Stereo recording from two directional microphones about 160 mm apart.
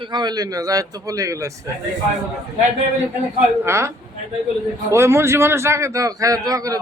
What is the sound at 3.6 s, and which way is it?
Speech, 15° right (ahead or behind).